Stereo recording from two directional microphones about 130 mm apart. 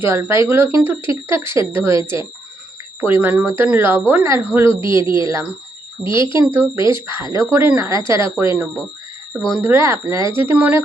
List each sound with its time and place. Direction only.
0.0 s speech: 20° right (ahead or behind)
6.0 s speech: 5° right (ahead or behind)
9.5 s speech: 15° right (ahead or behind)